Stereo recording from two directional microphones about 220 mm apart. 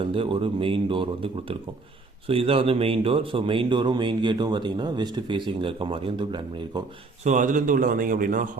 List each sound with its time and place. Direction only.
0.0 s speech: 25° right (ahead or behind)
7.3 s a man's voice: 35° right (ahead or behind)